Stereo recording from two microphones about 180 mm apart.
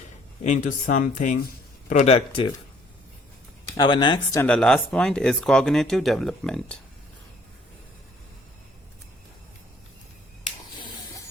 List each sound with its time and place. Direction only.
0.4 s speech: 45° left (ahead or behind)
3.8 s speech: 25° left (ahead or behind)
4.4 s speech: 5° left (ahead or behind)